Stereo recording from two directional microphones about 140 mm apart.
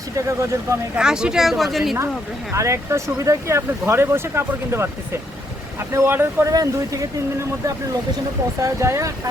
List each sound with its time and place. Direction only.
0.2 s speech: 20° right (ahead or behind)
0.9 s a woman's voice: 5° right (ahead or behind)
2.5 s speech: 20° right (ahead or behind)
8.6 s speech: 20° right (ahead or behind)